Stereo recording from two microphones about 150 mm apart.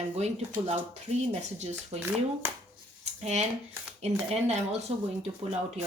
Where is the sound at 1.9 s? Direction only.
40° right (ahead or behind).